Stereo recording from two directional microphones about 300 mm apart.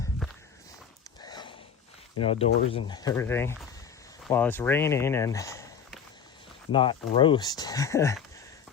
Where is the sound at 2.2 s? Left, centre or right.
Centre.